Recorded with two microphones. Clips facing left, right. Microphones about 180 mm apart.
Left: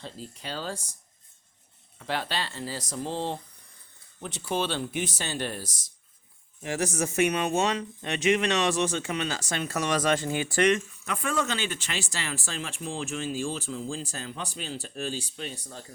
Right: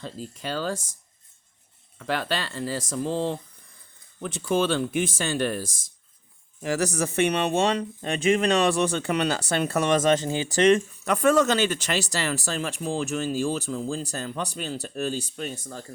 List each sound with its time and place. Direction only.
0.0 s speech: 45° right (ahead or behind)
2.0 s speech: 45° right (ahead or behind)
4.2 s speech: 50° right (ahead or behind)
6.6 s speech: 40° right (ahead or behind)
8.6 s speech: 60° right (ahead or behind)
9.9 s speech: 25° right (ahead or behind); by 15.9 s 45° right (ahead or behind)